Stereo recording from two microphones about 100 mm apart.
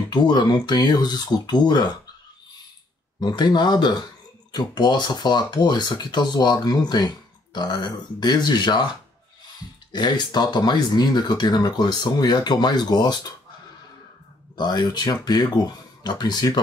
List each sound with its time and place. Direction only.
0.1 s speech: 45° left (ahead or behind)
3.2 s speech: 45° left (ahead or behind)
9.9 s speech: 45° left (ahead or behind)
14.5 s speech: 45° left (ahead or behind)